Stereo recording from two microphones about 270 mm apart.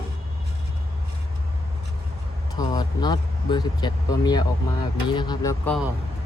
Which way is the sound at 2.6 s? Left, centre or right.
Centre.